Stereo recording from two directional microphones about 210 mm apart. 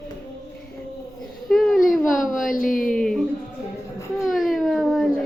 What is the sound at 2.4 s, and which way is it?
Speech, 40° left (ahead or behind).